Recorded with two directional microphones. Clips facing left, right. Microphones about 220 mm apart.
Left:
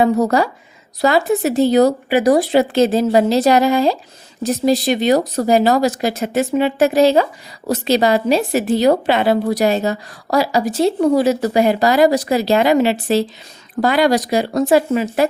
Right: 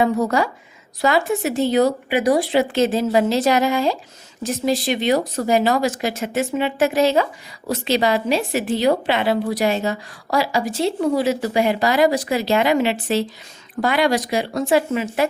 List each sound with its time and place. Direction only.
0.0 s a woman's voice: 35° left (ahead or behind)